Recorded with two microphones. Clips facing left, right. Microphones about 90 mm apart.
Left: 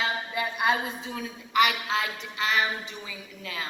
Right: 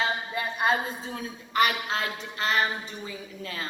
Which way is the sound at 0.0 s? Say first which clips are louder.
Even; 35° right (ahead or behind).